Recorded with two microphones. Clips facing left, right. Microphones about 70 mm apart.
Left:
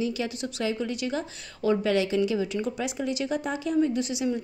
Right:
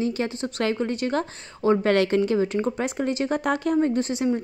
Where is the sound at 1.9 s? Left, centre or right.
Right.